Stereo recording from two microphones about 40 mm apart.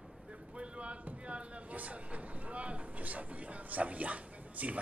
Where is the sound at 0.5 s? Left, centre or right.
Right.